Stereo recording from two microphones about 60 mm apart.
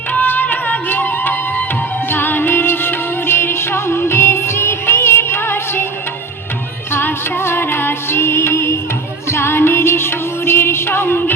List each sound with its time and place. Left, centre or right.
0.1 s music: left
6.9 s music: left